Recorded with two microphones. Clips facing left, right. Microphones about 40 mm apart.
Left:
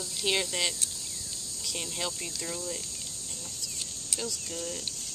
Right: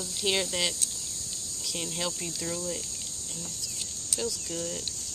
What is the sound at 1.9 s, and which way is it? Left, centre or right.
Speech, centre.